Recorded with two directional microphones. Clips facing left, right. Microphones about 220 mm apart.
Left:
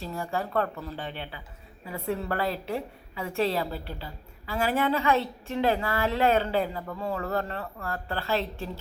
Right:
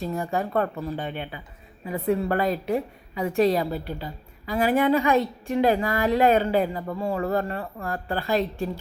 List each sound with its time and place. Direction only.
0.0 s a woman's voice: 15° right (ahead or behind)